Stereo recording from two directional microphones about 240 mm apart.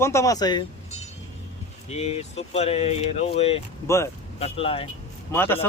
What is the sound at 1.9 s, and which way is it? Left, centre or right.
Speech, left.